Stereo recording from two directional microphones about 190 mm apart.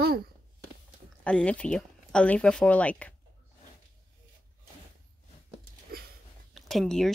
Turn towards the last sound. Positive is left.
turn(degrees=0)  # may be behind; listen again after turning